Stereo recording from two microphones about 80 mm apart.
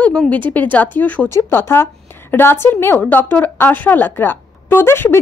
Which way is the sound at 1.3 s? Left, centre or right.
Left.